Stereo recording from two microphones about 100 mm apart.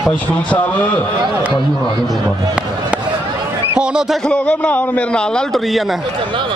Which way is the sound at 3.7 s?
10° right (ahead or behind).